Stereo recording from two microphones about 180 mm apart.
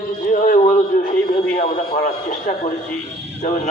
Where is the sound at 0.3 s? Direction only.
50° left (ahead or behind).